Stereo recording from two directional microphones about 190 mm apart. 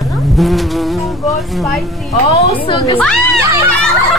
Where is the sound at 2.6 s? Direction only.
25° left (ahead or behind).